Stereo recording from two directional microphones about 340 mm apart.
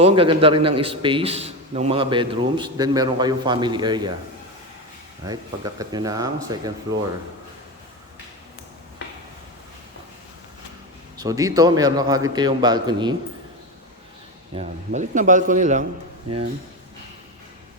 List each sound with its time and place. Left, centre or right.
0.0 s a man's voice: centre
5.2 s a man's voice: centre
11.2 s a man's voice: centre
14.5 s speech: centre